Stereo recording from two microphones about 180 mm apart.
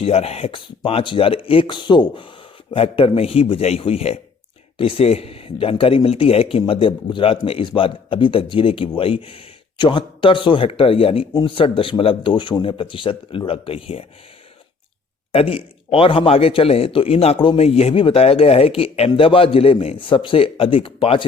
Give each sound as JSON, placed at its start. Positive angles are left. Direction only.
{"t": 0.0, "sound": "speech", "side_deg": 35}
{"t": 15.3, "sound": "speech", "side_deg": 35}